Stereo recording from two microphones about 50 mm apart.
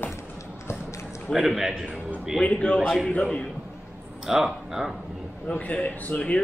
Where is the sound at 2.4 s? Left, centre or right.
Left.